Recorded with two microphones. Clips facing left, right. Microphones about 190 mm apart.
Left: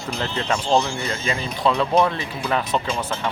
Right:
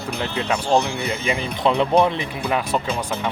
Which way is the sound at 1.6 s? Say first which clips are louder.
Right 2 dB; 30° right (ahead or behind).